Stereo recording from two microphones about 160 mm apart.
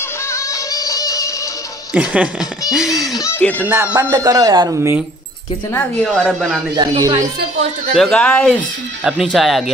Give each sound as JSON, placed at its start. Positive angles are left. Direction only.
{"t": 0.3, "sound": "music", "side_deg": 20}
{"t": 1.9, "sound": "speech", "side_deg": -10}
{"t": 3.2, "sound": "speech", "side_deg": 15}
{"t": 3.6, "sound": "speech", "side_deg": -10}
{"t": 5.8, "sound": "speech", "side_deg": 5}
{"t": 6.8, "sound": "speech", "side_deg": -30}
{"t": 8.1, "sound": "speech", "side_deg": 5}